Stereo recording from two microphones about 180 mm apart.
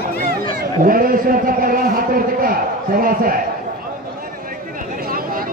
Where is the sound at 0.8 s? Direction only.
50° right (ahead or behind).